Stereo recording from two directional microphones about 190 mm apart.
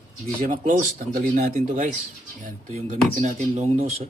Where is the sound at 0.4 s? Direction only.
40° right (ahead or behind).